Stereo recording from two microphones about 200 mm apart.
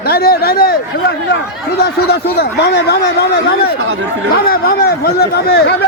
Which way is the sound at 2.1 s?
55° left (ahead or behind).